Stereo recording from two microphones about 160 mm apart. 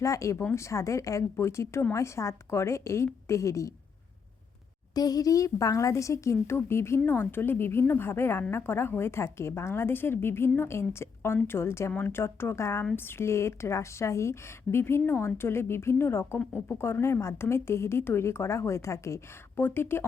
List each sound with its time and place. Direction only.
0.0 s a woman's voice: 20° left (ahead or behind)
4.9 s a woman's voice: 25° left (ahead or behind)